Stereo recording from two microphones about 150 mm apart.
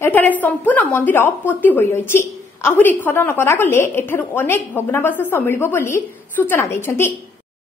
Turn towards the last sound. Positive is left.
turn(degrees=15)  # may be behind; listen again after turning